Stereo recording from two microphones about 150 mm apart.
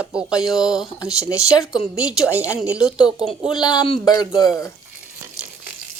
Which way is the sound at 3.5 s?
30° left (ahead or behind).